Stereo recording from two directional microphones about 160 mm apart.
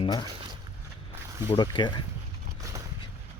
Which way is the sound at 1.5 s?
30° left (ahead or behind).